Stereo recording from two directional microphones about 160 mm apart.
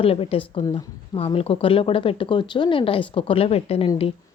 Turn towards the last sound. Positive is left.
turn(degrees=40)  # may be behind; listen again after turning